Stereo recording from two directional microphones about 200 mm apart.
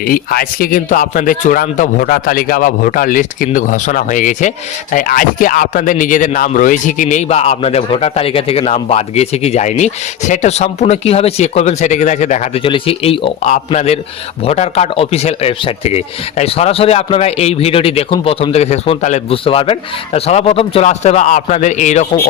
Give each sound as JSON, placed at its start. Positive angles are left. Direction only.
{"t": 0.0, "sound": "speech", "side_deg": 45}